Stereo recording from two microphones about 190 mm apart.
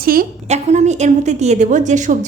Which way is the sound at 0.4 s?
35° right (ahead or behind).